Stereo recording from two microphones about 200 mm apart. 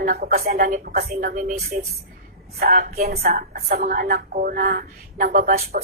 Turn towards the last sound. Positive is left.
turn(degrees=-35)  # may be behind; listen again after turning